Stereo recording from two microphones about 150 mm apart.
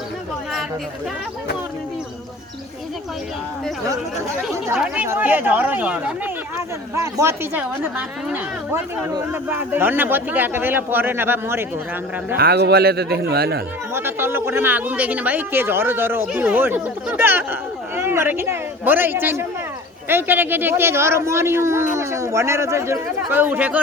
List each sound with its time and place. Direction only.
5.0 s speech: 15° right (ahead or behind)
6.9 s speech: 20° right (ahead or behind)
12.4 s speech: 90° right
13.9 s speech: 15° right (ahead or behind)